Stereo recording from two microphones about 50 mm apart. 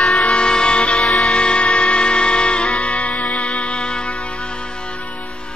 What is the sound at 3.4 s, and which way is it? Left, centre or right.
Music, centre.